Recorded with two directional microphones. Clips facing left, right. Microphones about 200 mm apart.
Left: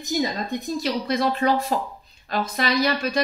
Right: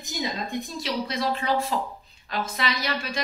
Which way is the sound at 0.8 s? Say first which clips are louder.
Left 5 dB; 45° left (ahead or behind).